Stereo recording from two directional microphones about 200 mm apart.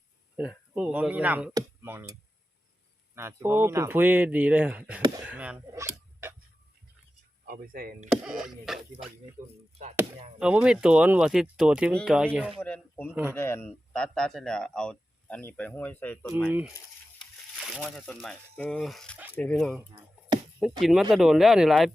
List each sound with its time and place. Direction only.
0.3 s speech: 5° right (ahead or behind)
3.2 s speech: 10° right (ahead or behind)
7.4 s speech: 45° right (ahead or behind)
8.1 s speech: 5° right (ahead or behind)
9.4 s speech: 40° right (ahead or behind)
10.4 s speech: 5° right (ahead or behind)
16.5 s speech: 10° right (ahead or behind)